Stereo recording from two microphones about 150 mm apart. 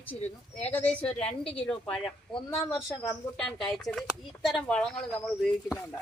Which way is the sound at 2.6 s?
Centre (ahead or behind).